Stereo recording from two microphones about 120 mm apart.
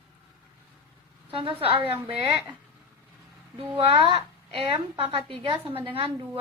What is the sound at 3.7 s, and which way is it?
A woman's voice, 50° right (ahead or behind).